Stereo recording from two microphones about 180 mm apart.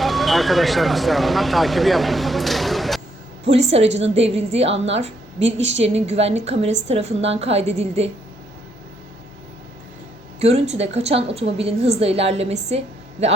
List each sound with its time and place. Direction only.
0.0 s speech: centre (ahead or behind)
3.9 s a woman's voice: 35° right (ahead or behind)
10.4 s a woman's voice: 35° right (ahead or behind)